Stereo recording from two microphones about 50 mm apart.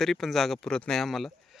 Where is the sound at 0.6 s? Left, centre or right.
Centre.